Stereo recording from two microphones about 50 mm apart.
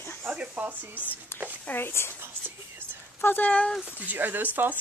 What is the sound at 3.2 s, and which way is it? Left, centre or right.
Speech, left.